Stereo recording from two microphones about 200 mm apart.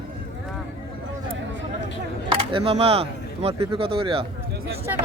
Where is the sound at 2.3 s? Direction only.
25° right (ahead or behind).